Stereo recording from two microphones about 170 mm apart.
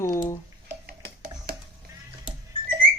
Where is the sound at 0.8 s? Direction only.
65° right (ahead or behind).